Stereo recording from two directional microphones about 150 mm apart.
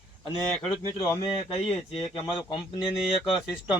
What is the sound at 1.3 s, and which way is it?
Speech, 40° left (ahead or behind).